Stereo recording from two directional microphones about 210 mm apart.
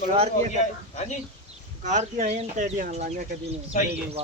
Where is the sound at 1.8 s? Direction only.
35° right (ahead or behind).